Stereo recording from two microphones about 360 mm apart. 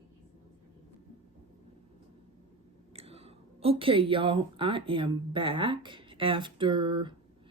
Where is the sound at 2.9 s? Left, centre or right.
Centre.